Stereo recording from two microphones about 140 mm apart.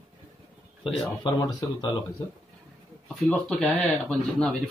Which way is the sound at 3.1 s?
5° left (ahead or behind).